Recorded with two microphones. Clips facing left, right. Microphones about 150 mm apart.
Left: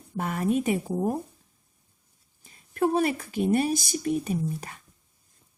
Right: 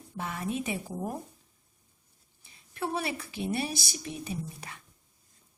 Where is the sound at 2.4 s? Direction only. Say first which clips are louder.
Left 10 dB; 45° left (ahead or behind).